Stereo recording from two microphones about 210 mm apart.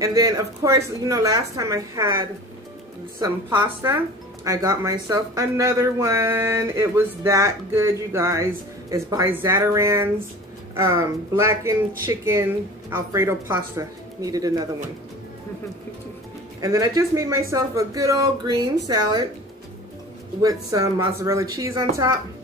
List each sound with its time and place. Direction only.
0.0 s speech: 15° right (ahead or behind)
16.6 s speech: 15° right (ahead or behind)
20.4 s speech: 15° right (ahead or behind)